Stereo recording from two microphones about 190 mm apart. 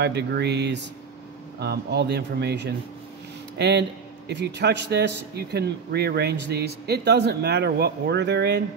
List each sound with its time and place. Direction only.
0.0 s a man's voice: 60° right (ahead or behind)